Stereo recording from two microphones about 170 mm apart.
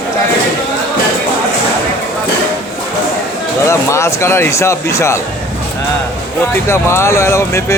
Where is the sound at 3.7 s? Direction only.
15° left (ahead or behind).